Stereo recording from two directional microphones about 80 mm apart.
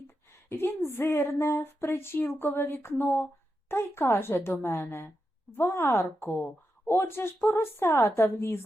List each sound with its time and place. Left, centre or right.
0.5 s speech: left